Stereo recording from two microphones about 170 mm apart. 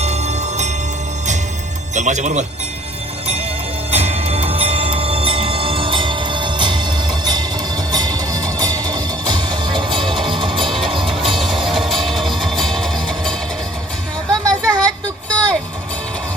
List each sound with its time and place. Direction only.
0.0 s music: 40° right (ahead or behind)
2.0 s speech: 45° right (ahead or behind)
3.9 s music: 40° right (ahead or behind)
10.6 s music: centre (ahead or behind)
14.4 s a sound: 5° left (ahead or behind)
15.3 s vehicle: 5° left (ahead or behind)